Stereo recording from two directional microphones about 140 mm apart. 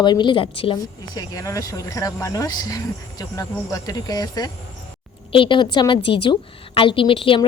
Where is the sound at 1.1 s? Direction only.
25° left (ahead or behind).